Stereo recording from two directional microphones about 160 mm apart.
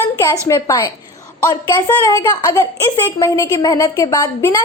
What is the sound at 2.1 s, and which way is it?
A woman's voice, 25° left (ahead or behind).